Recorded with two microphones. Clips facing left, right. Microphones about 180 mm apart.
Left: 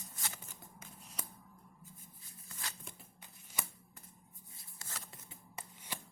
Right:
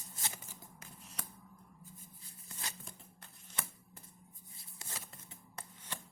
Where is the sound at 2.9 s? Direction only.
5° left (ahead or behind).